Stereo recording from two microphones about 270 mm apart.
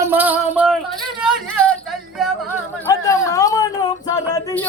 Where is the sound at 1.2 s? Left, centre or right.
Centre.